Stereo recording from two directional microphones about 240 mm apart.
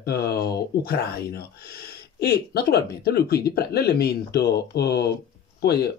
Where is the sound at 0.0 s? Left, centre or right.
Left.